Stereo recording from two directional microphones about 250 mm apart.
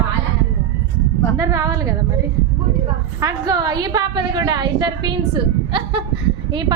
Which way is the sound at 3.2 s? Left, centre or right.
Centre.